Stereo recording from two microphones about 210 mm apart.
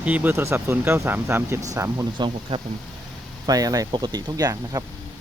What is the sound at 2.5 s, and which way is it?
Speech, 25° right (ahead or behind).